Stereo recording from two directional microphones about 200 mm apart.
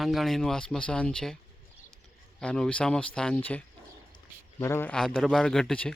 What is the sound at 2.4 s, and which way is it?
A man's voice, 5° left (ahead or behind).